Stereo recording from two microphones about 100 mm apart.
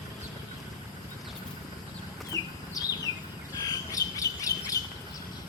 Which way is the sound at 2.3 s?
35° left (ahead or behind).